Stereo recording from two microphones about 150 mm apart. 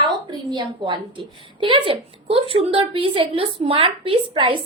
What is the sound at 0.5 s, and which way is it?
A woman's voice, 30° right (ahead or behind).